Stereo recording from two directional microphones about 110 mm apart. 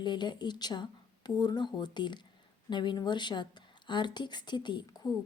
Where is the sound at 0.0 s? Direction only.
45° left (ahead or behind).